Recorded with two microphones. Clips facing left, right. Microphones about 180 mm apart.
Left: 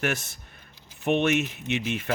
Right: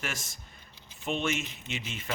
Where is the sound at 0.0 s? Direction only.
65° left (ahead or behind).